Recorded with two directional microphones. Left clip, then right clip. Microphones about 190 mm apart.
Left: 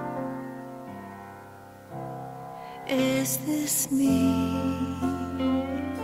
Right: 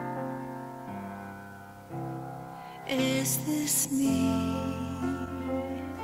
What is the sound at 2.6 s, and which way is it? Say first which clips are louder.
Music: left 3 dB; 30° left (ahead or behind).